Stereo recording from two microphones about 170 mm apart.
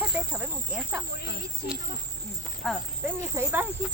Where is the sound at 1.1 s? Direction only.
70° left (ahead or behind).